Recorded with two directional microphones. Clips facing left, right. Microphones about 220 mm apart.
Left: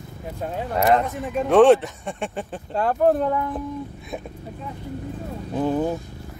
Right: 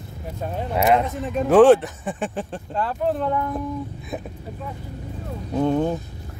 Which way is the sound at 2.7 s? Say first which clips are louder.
Left 5 dB; 50° left (ahead or behind).